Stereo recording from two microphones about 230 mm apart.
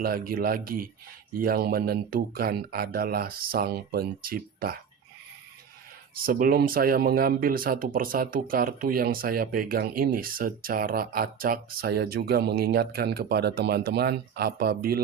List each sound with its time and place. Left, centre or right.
0.0 s speech: right
6.1 s speech: right